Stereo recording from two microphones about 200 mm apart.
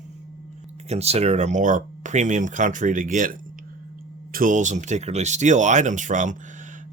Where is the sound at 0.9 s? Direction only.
30° right (ahead or behind).